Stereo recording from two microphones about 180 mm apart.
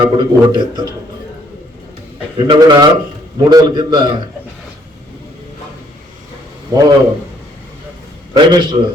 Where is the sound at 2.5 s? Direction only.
25° right (ahead or behind).